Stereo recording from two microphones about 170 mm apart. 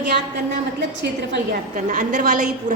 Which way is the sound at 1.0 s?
90° right.